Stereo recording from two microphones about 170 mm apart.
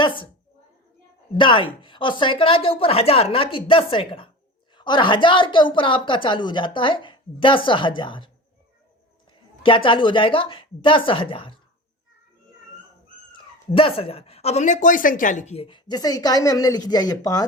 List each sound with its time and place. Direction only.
0.0 s a woman's voice: 30° left (ahead or behind)
1.4 s a woman's voice: 30° left (ahead or behind)
9.6 s speech: 30° left (ahead or behind)
13.7 s speech: 35° left (ahead or behind)